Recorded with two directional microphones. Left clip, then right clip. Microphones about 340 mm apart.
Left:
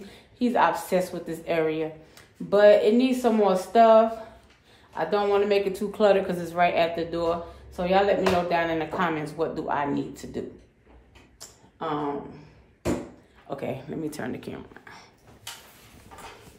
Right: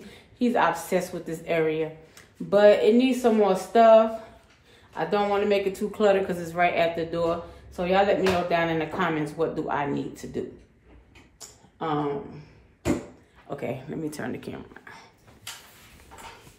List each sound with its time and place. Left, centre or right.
0.0 s speech: centre
11.8 s speech: centre
13.5 s speech: centre